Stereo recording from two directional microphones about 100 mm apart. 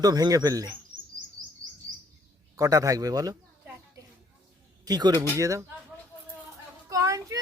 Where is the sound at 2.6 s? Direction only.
35° right (ahead or behind).